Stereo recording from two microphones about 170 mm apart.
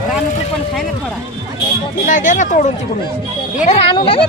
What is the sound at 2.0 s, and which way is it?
Speech, 50° left (ahead or behind).